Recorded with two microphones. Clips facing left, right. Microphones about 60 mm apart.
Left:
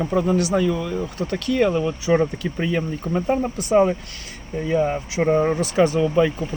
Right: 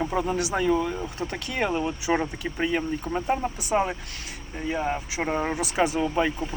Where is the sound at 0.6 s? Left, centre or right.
Right; by 2.8 s centre.